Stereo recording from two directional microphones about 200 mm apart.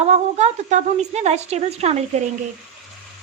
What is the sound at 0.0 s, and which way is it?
Speech, 35° right (ahead or behind).